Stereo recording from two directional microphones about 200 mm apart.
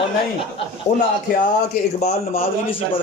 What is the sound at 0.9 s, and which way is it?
Speech, 35° left (ahead or behind).